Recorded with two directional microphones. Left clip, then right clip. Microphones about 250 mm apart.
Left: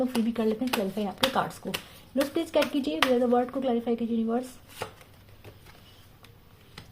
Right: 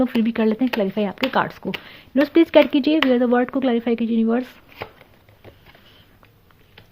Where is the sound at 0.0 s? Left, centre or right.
Right.